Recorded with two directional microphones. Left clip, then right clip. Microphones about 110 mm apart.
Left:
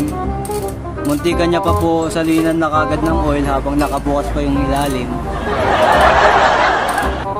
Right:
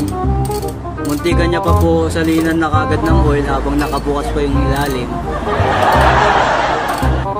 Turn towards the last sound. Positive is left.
turn(degrees=0)  # may be behind; listen again after turning